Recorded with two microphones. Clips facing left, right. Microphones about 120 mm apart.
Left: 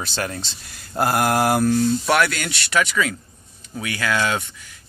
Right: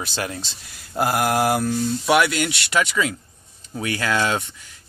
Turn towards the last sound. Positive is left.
turn(degrees=-25)  # may be behind; listen again after turning